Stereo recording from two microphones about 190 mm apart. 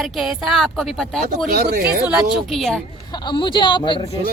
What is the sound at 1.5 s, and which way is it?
Speech, 55° right (ahead or behind).